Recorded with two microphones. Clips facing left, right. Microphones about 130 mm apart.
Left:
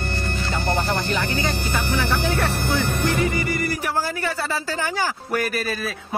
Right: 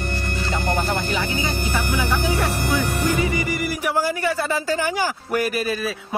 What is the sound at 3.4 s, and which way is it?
A man's voice, 10° right (ahead or behind).